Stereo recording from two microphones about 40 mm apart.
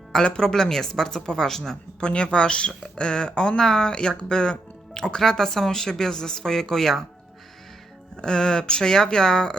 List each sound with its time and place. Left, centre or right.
0.3 s speech: centre
1.2 s speech: left
1.5 s speech: centre
2.0 s speech: left
8.1 s speech: centre